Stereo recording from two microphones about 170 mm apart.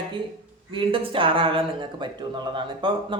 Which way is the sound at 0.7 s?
30° right (ahead or behind).